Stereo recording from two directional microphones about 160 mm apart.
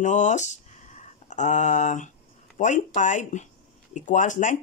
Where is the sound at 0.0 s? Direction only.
50° left (ahead or behind).